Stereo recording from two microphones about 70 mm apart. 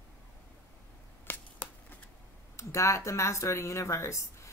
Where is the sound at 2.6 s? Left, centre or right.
Left.